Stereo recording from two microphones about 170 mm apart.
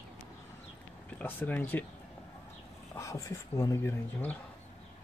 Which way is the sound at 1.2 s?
10° left (ahead or behind).